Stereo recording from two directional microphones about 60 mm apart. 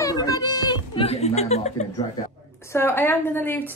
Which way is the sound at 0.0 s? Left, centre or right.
Left.